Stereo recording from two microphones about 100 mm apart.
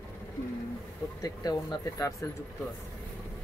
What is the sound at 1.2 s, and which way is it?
Speech, 40° left (ahead or behind).